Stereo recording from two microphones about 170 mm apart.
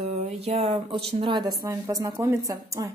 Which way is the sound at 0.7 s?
30° right (ahead or behind).